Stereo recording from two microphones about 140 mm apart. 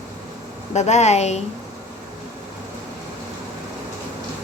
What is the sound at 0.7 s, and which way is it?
Speech, 55° left (ahead or behind).